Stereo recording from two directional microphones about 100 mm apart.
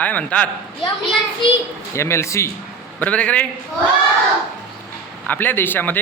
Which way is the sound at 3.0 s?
15° left (ahead or behind).